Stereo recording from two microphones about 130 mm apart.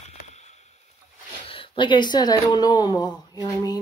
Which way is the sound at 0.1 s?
60° left (ahead or behind).